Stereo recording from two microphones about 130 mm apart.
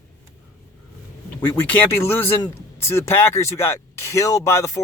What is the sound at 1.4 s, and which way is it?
Speech, 15° left (ahead or behind).